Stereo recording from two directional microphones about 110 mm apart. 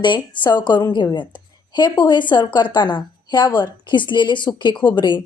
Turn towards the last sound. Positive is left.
turn(degrees=45)  # may be behind; listen again after turning